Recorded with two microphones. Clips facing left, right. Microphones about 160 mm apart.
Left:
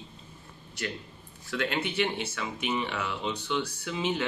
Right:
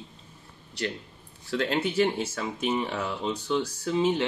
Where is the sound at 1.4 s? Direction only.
35° right (ahead or behind).